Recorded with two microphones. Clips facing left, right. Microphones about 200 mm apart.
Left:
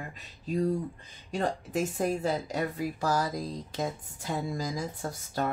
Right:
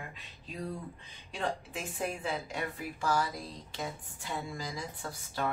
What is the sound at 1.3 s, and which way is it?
A woman's voice, 45° left (ahead or behind).